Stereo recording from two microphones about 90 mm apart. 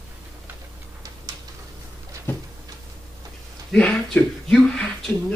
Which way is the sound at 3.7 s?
10° left (ahead or behind).